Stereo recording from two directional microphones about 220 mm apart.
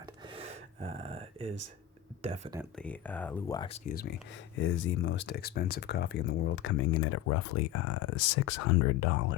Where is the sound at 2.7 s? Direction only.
5° left (ahead or behind).